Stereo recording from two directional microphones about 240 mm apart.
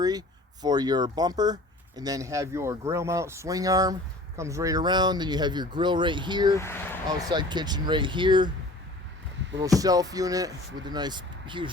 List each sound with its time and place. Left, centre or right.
0.0 s speech: centre
6.6 s speech: centre
7.3 s speech: centre
9.6 s speech: centre